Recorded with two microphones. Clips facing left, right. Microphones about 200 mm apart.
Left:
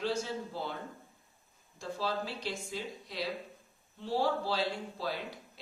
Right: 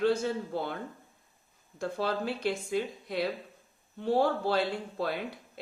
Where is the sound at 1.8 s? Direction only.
60° right (ahead or behind).